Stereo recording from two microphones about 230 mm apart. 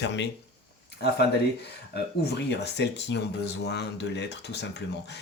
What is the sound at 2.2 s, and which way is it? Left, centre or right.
Speech, left.